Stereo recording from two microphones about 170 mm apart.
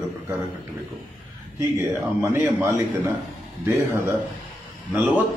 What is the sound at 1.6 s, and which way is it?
A man's voice, 15° right (ahead or behind).